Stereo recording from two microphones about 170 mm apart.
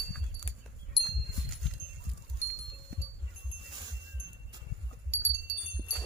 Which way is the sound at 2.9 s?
75° right (ahead or behind).